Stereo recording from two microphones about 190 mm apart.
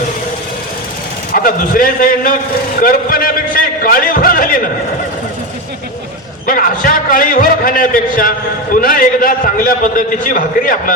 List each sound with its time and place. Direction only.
1.3 s a man's voice: 50° left (ahead or behind)
6.4 s a man's voice: 45° left (ahead or behind)